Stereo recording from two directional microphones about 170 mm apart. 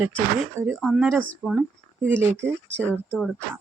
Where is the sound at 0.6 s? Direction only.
5° right (ahead or behind).